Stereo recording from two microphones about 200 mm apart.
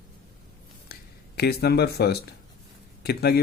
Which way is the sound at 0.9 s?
50° left (ahead or behind).